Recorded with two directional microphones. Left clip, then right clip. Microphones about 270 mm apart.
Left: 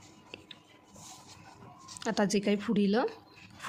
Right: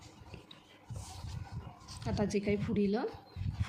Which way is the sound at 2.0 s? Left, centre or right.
Left.